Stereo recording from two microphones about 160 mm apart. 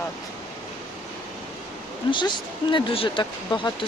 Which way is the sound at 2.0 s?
30° left (ahead or behind).